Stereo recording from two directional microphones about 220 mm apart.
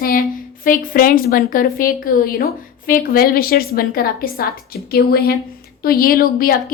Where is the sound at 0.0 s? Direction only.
40° left (ahead or behind).